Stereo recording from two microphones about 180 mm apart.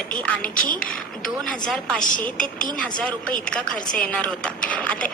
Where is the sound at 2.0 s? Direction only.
50° left (ahead or behind).